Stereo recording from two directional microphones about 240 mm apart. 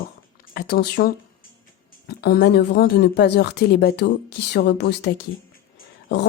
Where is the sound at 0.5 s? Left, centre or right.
Left.